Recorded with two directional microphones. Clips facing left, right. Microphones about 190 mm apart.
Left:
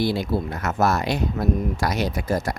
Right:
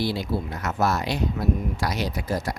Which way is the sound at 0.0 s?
50° left (ahead or behind).